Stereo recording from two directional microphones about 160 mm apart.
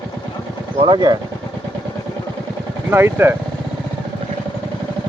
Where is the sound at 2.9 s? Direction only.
15° right (ahead or behind).